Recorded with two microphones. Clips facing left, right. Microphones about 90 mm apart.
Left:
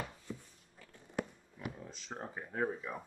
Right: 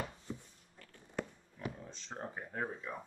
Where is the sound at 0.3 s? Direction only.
25° right (ahead or behind).